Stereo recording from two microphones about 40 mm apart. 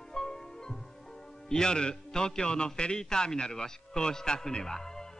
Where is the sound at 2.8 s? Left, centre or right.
Left.